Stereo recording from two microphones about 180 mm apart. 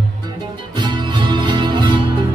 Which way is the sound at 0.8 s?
25° right (ahead or behind).